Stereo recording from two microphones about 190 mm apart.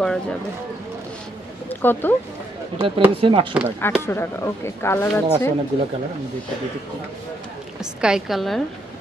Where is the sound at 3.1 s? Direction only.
30° right (ahead or behind).